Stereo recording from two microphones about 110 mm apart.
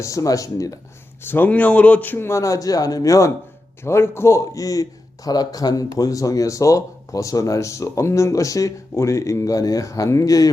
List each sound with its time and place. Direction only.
0.0 s a man's voice: 30° left (ahead or behind)
1.3 s a man's voice: 15° left (ahead or behind); by 10.5 s 30° left (ahead or behind)